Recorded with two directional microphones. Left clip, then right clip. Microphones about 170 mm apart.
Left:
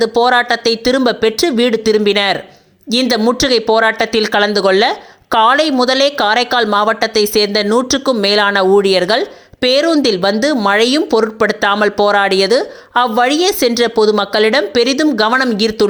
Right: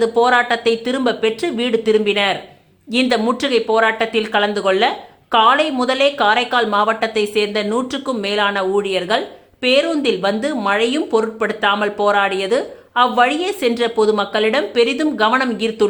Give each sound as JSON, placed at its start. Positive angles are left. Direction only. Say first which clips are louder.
{"t": 0.0, "sound": "speech", "louder": "left 2 dB", "side_deg": 45}